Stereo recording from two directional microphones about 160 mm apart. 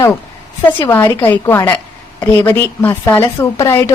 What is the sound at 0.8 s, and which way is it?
A woman's voice, 15° left (ahead or behind).